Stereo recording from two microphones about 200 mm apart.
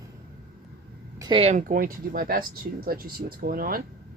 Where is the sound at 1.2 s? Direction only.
25° right (ahead or behind).